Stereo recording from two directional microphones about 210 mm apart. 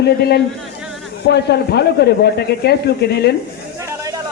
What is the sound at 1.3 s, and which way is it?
Speech, 50° left (ahead or behind).